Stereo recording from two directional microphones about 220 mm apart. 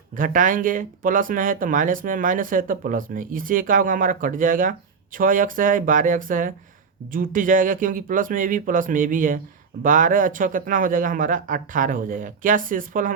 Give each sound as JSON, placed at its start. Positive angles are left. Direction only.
{"t": 0.2, "sound": "speech", "side_deg": -35}